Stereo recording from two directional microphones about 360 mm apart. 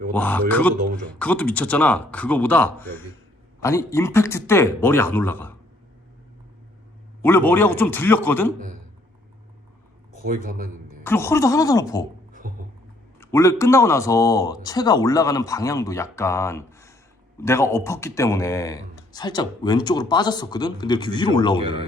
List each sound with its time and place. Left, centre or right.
0.1 s speech: centre
7.2 s speech: centre
10.2 s speech: right
11.0 s speech: centre
12.4 s speech: right
13.1 s speech: centre